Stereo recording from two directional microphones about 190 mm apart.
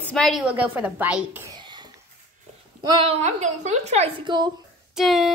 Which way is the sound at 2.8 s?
30° right (ahead or behind).